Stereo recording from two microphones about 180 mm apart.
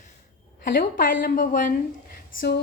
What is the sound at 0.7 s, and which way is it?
A woman's voice, 50° left (ahead or behind).